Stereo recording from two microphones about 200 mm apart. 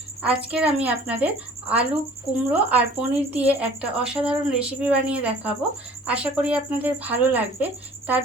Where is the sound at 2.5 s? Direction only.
5° right (ahead or behind).